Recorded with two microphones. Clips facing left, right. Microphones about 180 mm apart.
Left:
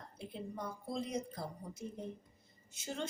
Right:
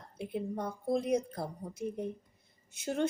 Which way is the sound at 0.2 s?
60° right (ahead or behind).